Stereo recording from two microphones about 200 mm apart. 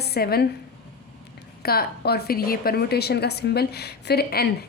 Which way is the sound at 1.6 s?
50° left (ahead or behind).